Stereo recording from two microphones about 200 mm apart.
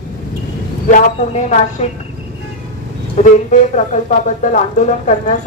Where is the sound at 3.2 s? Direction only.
35° left (ahead or behind).